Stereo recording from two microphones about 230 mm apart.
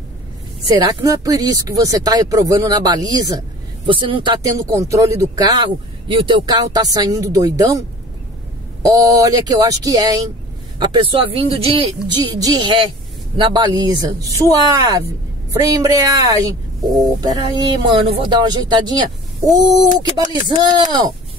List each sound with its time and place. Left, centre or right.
0.7 s speech: centre
8.9 s speech: centre